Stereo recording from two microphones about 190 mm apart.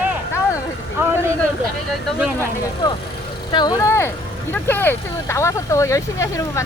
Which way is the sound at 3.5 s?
20° left (ahead or behind).